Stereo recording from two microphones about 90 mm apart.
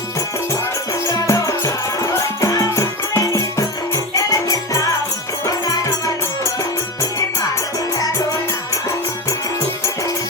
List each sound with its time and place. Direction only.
1.0 s music: 35° left (ahead or behind)
7.9 s music: 40° left (ahead or behind)